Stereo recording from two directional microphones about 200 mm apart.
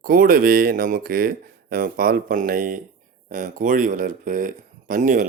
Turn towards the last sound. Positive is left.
turn(degrees=-40)  # may be behind; listen again after turning